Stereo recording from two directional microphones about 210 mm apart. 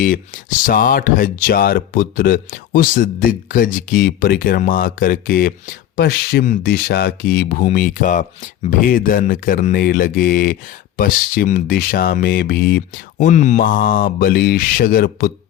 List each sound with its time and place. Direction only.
0.6 s speech: 40° left (ahead or behind)